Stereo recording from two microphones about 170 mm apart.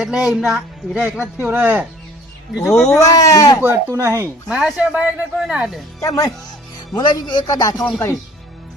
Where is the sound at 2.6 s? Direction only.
Centre (ahead or behind).